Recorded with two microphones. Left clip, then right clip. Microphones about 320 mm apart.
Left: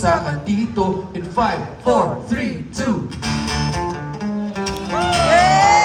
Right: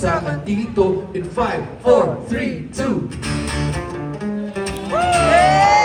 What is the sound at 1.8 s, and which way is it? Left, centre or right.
Music, centre.